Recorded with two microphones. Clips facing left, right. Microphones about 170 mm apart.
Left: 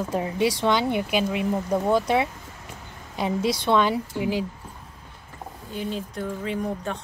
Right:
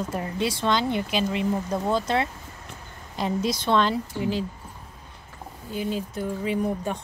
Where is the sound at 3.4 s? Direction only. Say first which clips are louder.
Left 2 dB; 65° left (ahead or behind).